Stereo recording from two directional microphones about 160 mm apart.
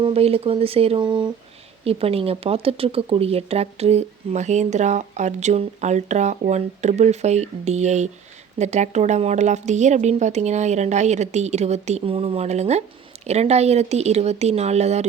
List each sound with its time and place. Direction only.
0.0 s speech: 40° right (ahead or behind)